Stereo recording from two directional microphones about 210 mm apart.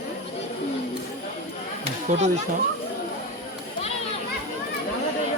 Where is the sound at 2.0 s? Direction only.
30° right (ahead or behind).